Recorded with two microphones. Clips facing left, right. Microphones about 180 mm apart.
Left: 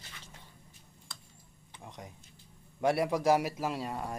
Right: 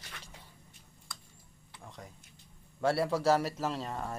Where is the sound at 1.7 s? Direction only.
20° left (ahead or behind).